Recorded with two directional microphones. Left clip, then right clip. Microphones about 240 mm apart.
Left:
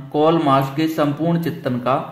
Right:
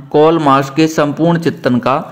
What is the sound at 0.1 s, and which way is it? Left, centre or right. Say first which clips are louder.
A man's voice: right 6 dB; right.